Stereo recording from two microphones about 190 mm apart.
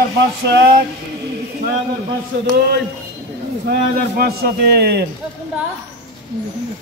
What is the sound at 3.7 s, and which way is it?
A man's voice, 55° right (ahead or behind).